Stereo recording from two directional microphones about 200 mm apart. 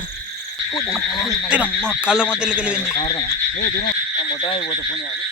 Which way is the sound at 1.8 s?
5° right (ahead or behind).